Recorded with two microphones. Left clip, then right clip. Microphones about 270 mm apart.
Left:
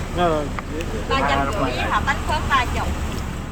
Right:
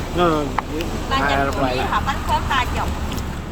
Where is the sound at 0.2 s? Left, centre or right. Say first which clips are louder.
Right 2 dB; right.